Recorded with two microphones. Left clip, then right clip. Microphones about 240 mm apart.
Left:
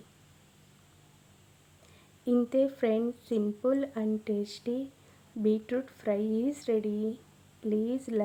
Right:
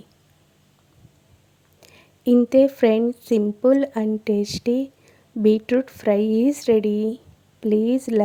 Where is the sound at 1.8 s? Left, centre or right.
Right.